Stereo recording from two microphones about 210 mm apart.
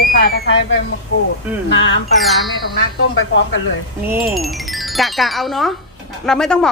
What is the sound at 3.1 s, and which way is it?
Speech, 65° left (ahead or behind).